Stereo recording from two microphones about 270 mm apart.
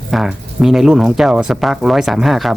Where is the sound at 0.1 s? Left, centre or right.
Centre.